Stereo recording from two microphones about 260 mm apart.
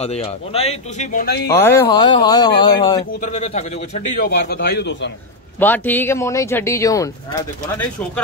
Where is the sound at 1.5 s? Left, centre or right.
Centre.